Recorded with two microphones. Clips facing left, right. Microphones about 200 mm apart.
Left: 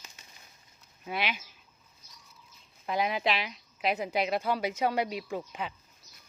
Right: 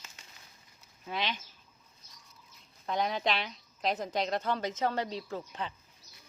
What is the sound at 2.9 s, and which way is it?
A woman's voice, 5° left (ahead or behind).